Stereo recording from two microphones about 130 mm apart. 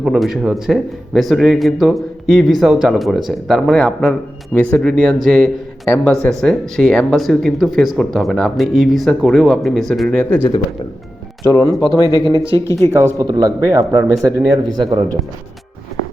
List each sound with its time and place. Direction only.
0.0 s a man's voice: centre (ahead or behind)
11.4 s speech: 30° left (ahead or behind)
12.0 s speech: 30° right (ahead or behind)
12.5 s speech: 20° left (ahead or behind)
13.1 s a man's voice: 30° right (ahead or behind)